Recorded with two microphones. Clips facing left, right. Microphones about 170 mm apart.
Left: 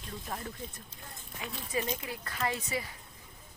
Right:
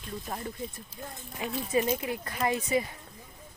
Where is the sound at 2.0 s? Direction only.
20° right (ahead or behind).